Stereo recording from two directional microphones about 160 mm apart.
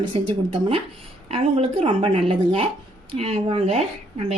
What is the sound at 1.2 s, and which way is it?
A woman's voice, 40° right (ahead or behind).